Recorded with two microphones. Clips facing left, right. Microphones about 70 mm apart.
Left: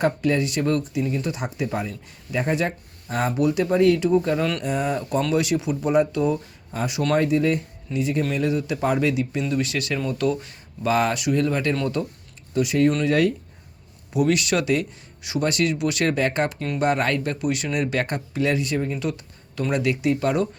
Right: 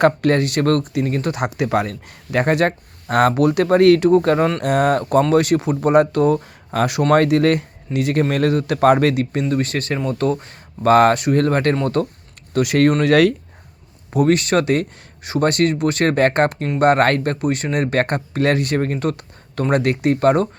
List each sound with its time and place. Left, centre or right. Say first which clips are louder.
0.0 s speech: right 6 dB; right
9.5 s speech: right 4 dB; right
12.5 s speech: right 4 dB; right
14.1 s speech: right 5 dB; right